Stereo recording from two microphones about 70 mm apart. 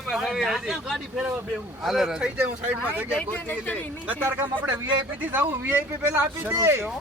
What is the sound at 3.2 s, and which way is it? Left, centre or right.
Speech, left.